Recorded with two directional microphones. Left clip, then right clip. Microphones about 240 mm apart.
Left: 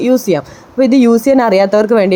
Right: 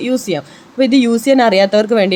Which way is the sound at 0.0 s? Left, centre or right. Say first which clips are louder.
Left 6 dB; centre.